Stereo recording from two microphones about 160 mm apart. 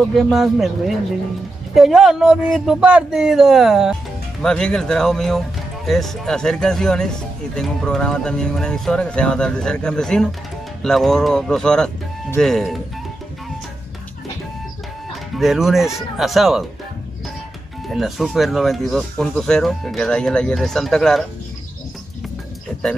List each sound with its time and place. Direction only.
0.1 s speech: centre (ahead or behind)
15.3 s speech: centre (ahead or behind)
17.8 s speech: centre (ahead or behind)